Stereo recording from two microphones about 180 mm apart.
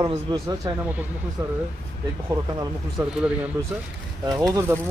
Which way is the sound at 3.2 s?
5° right (ahead or behind).